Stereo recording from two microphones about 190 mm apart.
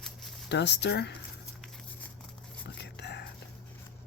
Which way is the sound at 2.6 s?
70° left (ahead or behind).